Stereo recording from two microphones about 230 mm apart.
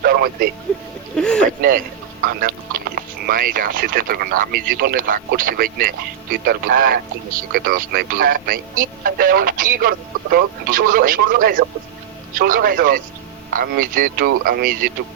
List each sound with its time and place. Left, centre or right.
0.0 s a sound: right
1.1 s boat: centre
2.2 s speech: right